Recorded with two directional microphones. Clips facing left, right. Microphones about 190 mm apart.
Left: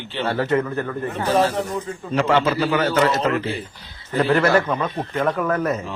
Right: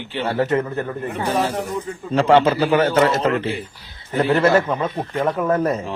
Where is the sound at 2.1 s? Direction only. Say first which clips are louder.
Right 4 dB; 30° right (ahead or behind).